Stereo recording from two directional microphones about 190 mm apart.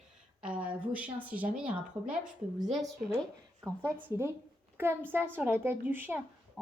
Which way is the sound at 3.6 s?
15° right (ahead or behind).